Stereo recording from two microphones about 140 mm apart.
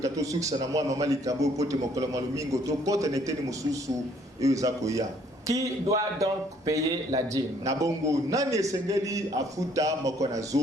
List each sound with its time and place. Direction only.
0.0 s a man's voice: 25° right (ahead or behind)